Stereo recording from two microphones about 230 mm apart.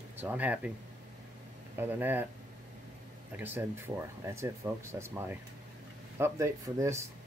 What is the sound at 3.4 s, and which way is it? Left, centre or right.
Speech, centre.